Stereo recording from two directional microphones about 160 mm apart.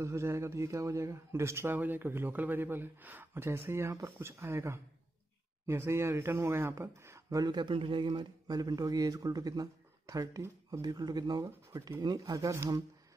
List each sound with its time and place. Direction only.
0.0 s speech: 20° right (ahead or behind)